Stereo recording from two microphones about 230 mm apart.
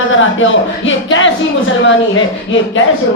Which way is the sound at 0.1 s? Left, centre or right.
Left.